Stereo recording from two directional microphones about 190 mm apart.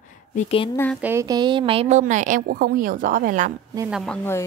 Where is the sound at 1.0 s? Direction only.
15° right (ahead or behind); by 3.5 s 45° right (ahead or behind).